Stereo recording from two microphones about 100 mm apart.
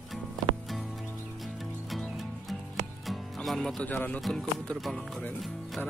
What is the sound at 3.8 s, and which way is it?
Speech, 15° left (ahead or behind).